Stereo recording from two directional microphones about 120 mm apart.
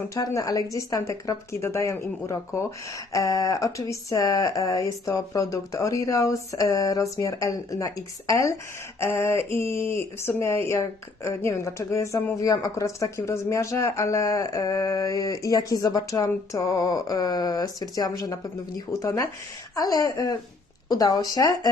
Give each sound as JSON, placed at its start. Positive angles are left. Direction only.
{"t": 0.1, "sound": "a woman's voice", "side_deg": 30}